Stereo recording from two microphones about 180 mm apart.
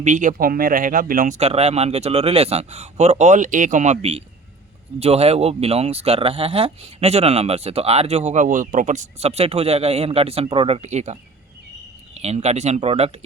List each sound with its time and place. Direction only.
0.0 s speech: 45° right (ahead or behind)